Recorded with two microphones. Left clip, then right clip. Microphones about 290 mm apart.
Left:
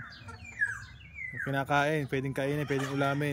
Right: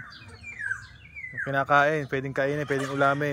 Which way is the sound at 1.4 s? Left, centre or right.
Centre.